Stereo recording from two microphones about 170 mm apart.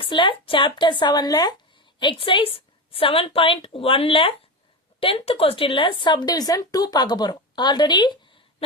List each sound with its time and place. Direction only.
0.0 s a woman's voice: 30° left (ahead or behind)